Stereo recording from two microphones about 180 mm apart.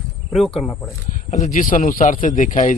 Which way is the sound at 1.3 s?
40° left (ahead or behind).